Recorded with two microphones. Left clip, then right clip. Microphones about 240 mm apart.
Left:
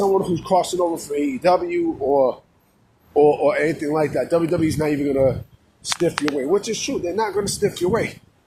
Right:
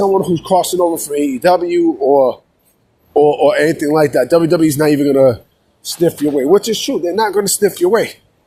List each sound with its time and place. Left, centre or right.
0.0 s speech: right